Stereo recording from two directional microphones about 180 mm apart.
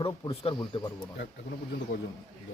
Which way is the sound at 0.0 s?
25° left (ahead or behind).